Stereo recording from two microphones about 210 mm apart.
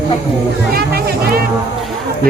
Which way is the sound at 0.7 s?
45° right (ahead or behind).